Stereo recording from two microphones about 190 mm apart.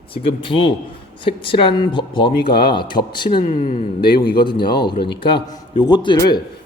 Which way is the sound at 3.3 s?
40° left (ahead or behind).